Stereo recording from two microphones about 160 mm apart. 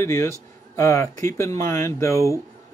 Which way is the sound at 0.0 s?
15° left (ahead or behind).